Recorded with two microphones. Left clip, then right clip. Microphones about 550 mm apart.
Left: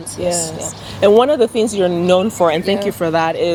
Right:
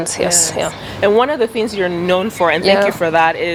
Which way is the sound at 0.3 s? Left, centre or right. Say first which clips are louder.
Right 1 dB; right.